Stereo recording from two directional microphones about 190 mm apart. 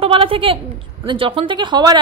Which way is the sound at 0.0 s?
30° right (ahead or behind).